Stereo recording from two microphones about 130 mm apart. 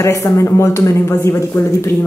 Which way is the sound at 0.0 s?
20° left (ahead or behind).